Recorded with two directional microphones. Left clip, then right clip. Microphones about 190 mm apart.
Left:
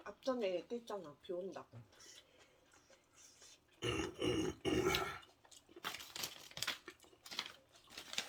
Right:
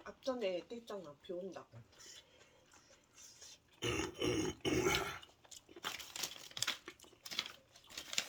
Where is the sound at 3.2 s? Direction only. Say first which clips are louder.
Right 6 dB; 30° right (ahead or behind).